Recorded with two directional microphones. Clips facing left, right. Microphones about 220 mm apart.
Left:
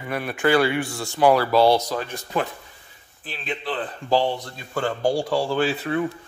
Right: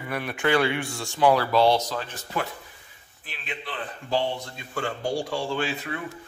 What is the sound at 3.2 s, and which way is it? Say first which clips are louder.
Speech: left 7 dB; 35° left (ahead or behind).